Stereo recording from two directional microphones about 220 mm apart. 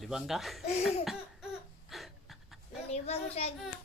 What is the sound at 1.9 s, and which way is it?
Pant, centre (ahead or behind).